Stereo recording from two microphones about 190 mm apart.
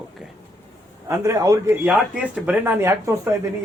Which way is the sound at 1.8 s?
5° right (ahead or behind).